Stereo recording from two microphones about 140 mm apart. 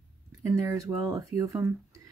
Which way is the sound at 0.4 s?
20° right (ahead or behind).